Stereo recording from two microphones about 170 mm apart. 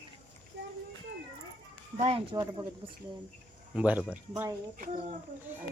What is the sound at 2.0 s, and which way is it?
Speech, 35° right (ahead or behind).